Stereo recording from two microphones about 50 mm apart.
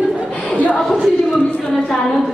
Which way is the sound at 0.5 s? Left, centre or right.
Left.